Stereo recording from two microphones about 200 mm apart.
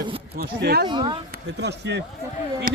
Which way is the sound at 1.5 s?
60° right (ahead or behind).